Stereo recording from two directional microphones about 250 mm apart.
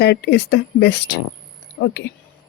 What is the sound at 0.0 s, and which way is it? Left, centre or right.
Speech, left.